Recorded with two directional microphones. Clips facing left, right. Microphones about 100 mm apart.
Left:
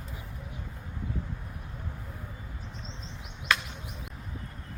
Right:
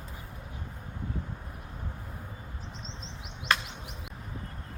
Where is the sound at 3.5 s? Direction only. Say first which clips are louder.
Even; 40° right (ahead or behind).